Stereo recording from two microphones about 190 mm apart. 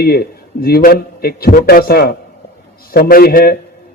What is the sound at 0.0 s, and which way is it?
Speech, 55° left (ahead or behind).